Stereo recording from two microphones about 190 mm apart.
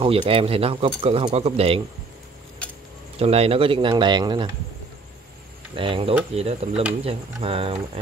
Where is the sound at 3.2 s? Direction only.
30° right (ahead or behind).